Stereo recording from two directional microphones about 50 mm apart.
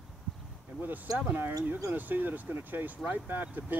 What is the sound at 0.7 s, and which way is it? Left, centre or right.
Speech, right.